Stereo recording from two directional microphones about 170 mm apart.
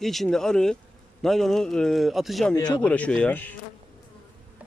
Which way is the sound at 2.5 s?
25° left (ahead or behind).